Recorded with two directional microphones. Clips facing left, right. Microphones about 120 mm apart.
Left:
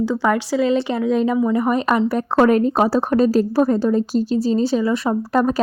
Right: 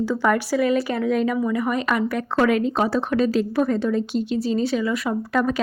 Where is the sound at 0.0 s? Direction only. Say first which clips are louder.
Left 2 dB; 15° left (ahead or behind).